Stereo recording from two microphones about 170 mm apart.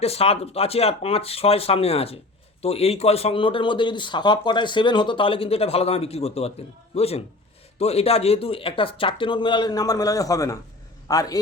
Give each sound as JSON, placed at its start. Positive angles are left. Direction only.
{"t": 0.0, "sound": "a man's voice", "side_deg": 35}